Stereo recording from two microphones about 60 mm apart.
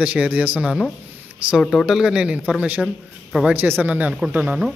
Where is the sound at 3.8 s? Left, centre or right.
Right.